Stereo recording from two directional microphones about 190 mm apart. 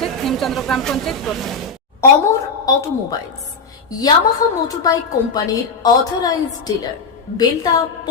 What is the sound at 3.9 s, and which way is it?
A woman's voice, 20° left (ahead or behind).